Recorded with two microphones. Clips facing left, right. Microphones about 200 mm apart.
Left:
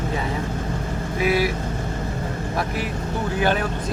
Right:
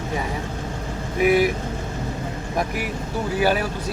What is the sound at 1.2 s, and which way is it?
Speech, 20° right (ahead or behind).